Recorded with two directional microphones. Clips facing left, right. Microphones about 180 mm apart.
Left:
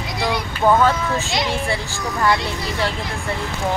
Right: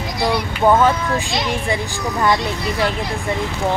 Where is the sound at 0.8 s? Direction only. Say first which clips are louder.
Right 2 dB; 15° right (ahead or behind).